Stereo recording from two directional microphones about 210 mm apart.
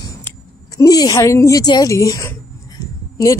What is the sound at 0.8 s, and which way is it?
Speech, 15° left (ahead or behind).